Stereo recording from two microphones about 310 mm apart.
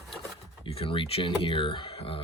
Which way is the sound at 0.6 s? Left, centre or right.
Centre.